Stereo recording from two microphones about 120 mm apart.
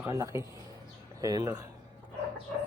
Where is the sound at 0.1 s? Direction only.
25° right (ahead or behind).